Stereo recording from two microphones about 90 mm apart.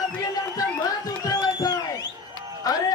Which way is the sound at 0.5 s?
45° left (ahead or behind).